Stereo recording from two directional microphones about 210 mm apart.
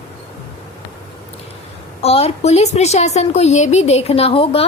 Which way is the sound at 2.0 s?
30° left (ahead or behind).